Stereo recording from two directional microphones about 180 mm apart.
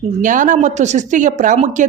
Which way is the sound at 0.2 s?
45° right (ahead or behind).